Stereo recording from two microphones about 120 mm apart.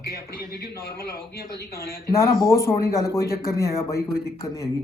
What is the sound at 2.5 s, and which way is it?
Speech, 25° left (ahead or behind).